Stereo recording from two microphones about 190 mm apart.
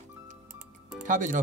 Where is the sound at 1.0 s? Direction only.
40° right (ahead or behind).